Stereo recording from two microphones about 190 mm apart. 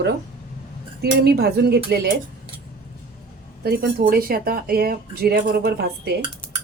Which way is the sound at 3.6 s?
50° right (ahead or behind).